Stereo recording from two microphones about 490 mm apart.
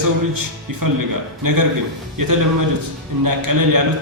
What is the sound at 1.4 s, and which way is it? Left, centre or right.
A man's voice, right.